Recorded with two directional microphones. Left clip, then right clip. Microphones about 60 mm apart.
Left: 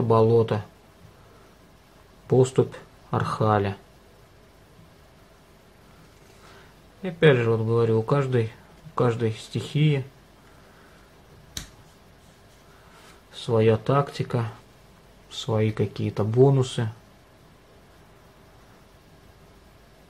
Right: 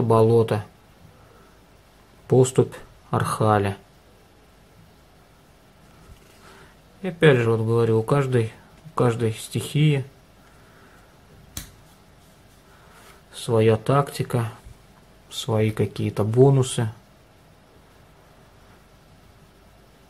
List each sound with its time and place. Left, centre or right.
0.1 s speech: right
2.2 s speech: right
7.0 s speech: right
13.3 s speech: right